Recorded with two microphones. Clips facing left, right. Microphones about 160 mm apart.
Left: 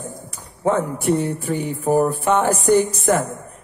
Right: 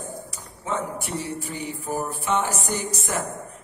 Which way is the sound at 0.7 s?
55° left (ahead or behind).